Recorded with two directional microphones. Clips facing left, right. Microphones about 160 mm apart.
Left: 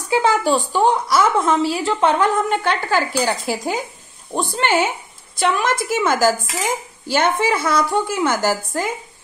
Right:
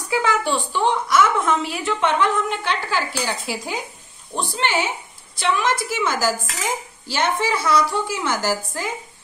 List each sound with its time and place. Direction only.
0.1 s a woman's voice: 30° left (ahead or behind); by 8.9 s 50° left (ahead or behind)